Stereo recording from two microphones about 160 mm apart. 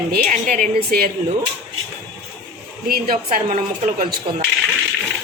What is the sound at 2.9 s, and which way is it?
A woman's voice, 60° right (ahead or behind).